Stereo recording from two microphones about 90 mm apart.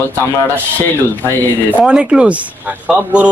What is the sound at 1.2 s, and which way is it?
Speech, 20° left (ahead or behind).